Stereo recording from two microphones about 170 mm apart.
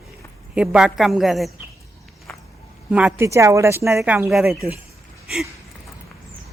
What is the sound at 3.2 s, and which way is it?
A woman's voice, 15° right (ahead or behind).